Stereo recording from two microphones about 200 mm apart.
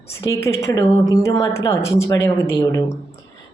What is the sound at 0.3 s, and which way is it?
Speech, 15° left (ahead or behind).